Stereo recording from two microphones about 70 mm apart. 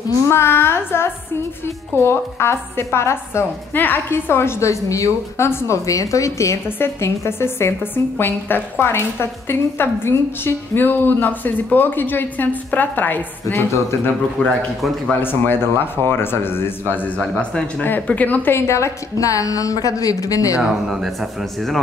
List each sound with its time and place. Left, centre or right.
0.3 s a woman's voice: left
3.7 s a woman's voice: left
5.9 s a woman's voice: left
14.4 s speech: centre
15.1 s a woman's voice: left
17.3 s speech: centre
18.5 s a woman's voice: left
20.5 s speech: centre